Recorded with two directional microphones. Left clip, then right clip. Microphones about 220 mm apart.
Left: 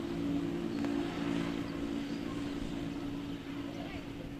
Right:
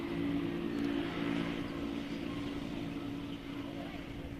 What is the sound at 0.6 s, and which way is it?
Vehicle, 45° left (ahead or behind).